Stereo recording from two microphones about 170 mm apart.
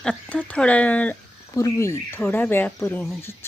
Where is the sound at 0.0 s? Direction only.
5° left (ahead or behind).